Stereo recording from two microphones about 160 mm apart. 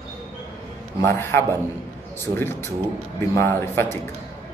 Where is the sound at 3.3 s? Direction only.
15° left (ahead or behind).